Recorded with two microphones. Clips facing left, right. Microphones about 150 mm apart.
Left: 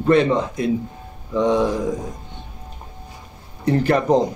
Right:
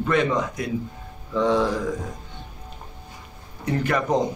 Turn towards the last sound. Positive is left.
turn(degrees=35)  # may be behind; listen again after turning